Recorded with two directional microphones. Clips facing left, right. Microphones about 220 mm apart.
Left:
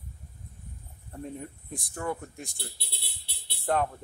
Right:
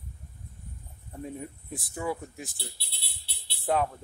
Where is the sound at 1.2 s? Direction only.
5° right (ahead or behind).